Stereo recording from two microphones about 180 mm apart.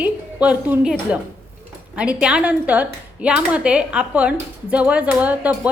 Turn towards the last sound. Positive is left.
turn(degrees=-10)  # may be behind; listen again after turning